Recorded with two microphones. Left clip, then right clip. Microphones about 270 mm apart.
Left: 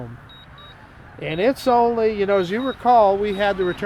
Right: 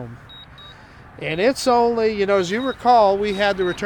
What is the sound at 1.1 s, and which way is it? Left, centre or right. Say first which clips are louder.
Speech: right 1 dB; centre.